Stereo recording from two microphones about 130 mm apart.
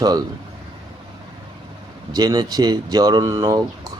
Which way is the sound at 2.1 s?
30° right (ahead or behind).